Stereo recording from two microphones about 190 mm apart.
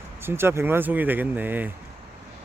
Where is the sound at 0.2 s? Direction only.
10° right (ahead or behind).